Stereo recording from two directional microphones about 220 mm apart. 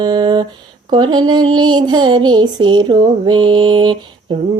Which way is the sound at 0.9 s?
20° right (ahead or behind).